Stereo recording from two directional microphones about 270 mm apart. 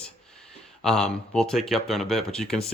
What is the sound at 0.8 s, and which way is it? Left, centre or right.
Speech, centre.